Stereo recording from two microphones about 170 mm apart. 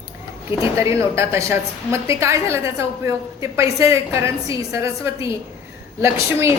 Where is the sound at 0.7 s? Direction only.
15° right (ahead or behind).